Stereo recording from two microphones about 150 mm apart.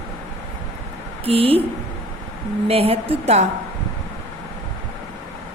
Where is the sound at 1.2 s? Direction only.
40° right (ahead or behind).